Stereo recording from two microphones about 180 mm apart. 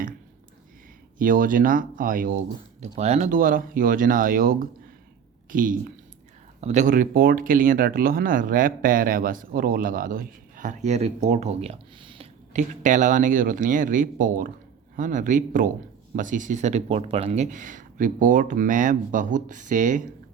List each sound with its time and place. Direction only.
1.2 s speech: 50° right (ahead or behind)
2.8 s speech: 35° right (ahead or behind)
12.5 s speech: 45° right (ahead or behind)